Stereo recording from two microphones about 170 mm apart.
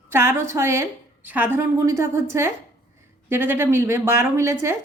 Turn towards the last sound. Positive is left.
turn(degrees=-15)  # may be behind; listen again after turning